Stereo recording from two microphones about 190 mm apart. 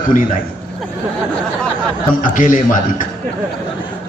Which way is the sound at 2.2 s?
45° left (ahead or behind).